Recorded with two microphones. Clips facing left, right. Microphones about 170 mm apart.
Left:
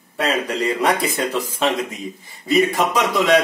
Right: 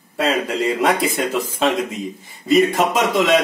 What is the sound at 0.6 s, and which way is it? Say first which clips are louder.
Speech: right 1 dB; 25° right (ahead or behind).